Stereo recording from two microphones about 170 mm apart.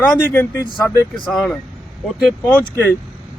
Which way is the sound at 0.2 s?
10° left (ahead or behind).